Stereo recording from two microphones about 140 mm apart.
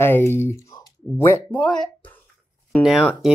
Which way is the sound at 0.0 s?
15° left (ahead or behind).